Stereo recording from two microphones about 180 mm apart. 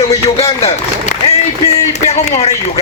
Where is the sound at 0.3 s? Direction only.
35° left (ahead or behind).